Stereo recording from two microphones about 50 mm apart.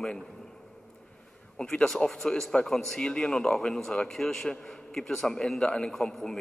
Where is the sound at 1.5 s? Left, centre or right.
Centre.